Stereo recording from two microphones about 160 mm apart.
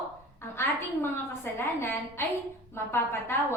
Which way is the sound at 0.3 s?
15° left (ahead or behind).